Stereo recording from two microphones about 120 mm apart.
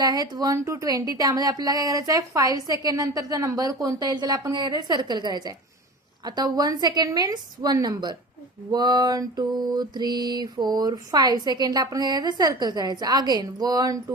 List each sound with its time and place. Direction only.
0.0 s mantra: 35° right (ahead or behind)